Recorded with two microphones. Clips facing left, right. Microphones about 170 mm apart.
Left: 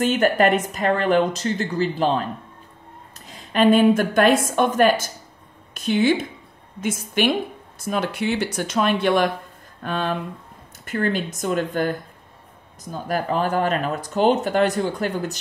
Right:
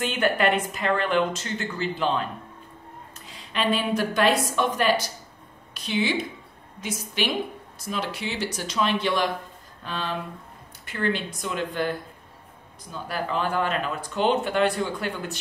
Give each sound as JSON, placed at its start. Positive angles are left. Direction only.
{"t": 0.0, "sound": "speech", "side_deg": 40}
{"t": 3.3, "sound": "a woman's voice", "side_deg": 45}